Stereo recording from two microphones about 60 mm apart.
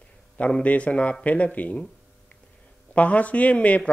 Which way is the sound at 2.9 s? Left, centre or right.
Left.